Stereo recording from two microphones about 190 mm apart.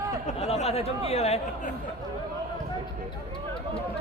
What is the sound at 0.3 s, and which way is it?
Speech, 35° left (ahead or behind).